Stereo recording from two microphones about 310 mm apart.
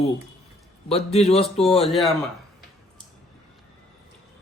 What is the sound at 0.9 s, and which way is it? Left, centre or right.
Speech, centre.